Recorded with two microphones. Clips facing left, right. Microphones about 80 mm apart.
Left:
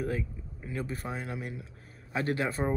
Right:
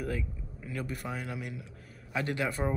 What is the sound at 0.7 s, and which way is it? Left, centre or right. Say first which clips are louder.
Speech: left 1 dB; left.